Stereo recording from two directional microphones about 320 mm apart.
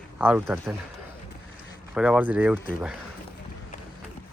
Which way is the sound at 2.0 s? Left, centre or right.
Centre.